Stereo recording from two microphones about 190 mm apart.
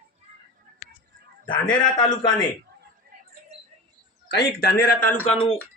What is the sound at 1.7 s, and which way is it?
Speech, 25° left (ahead or behind).